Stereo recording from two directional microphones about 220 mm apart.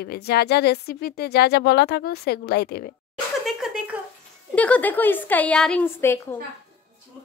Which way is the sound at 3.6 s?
Centre (ahead or behind).